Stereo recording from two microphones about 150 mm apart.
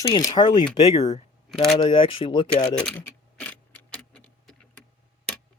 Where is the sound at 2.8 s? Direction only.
5° left (ahead or behind).